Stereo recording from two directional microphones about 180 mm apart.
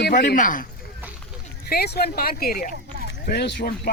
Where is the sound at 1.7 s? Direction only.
60° left (ahead or behind).